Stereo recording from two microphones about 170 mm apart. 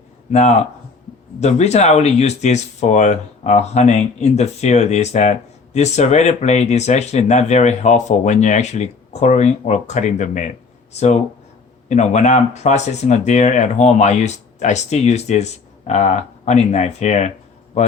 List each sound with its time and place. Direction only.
0.3 s a man's voice: 40° left (ahead or behind)